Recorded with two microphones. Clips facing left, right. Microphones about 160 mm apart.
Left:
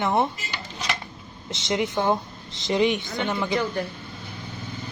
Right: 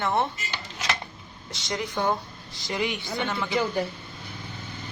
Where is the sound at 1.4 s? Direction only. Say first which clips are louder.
Left 6 dB; 20° left (ahead or behind).